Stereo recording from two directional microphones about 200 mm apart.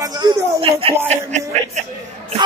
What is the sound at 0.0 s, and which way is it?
Speech, 20° right (ahead or behind).